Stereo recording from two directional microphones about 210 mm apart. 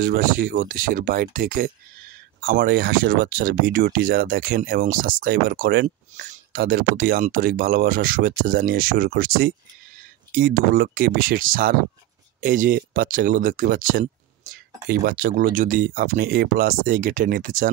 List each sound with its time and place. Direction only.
0.0 s speech: 40° right (ahead or behind)
6.1 s speech: 35° right (ahead or behind)